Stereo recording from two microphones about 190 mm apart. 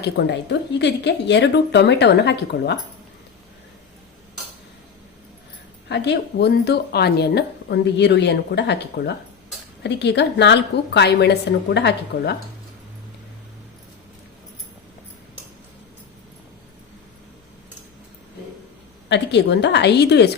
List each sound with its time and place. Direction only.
0.0 s a woman's voice: 65° left (ahead or behind)
5.9 s a woman's voice: 60° left (ahead or behind)
19.0 s a woman's voice: 65° left (ahead or behind)